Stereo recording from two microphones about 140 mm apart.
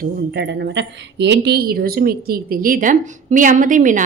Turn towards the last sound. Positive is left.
turn(degrees=-70)  # may be behind; listen again after turning